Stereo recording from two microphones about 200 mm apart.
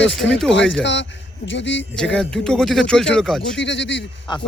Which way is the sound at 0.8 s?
65° left (ahead or behind).